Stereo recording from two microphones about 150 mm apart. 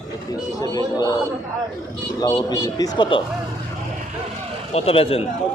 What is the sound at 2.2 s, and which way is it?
Speech, 30° left (ahead or behind).